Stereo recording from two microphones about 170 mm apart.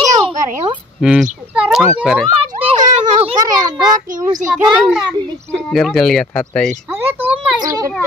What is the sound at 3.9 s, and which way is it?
Speech, 50° right (ahead or behind).